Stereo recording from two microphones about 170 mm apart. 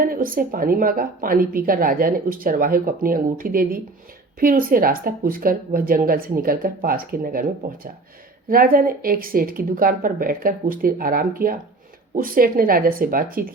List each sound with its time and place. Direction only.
0.0 s a woman's voice: 55° right (ahead or behind)
8.4 s a woman's voice: 55° right (ahead or behind)